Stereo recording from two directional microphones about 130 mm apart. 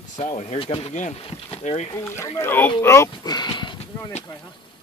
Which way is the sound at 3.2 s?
35° left (ahead or behind).